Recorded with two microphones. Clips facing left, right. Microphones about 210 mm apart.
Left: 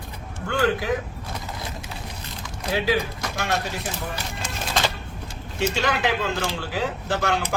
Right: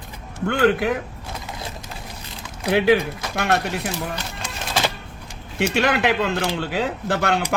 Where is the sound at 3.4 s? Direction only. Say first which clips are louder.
Right 5 dB; 60° right (ahead or behind).